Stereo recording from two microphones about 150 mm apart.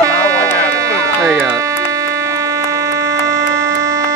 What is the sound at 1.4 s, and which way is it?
Music, 20° right (ahead or behind).